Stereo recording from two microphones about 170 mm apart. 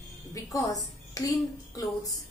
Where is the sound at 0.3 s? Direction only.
20° left (ahead or behind).